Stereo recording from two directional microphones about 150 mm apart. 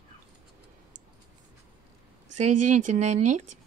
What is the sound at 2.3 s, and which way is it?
Speech, 55° right (ahead or behind).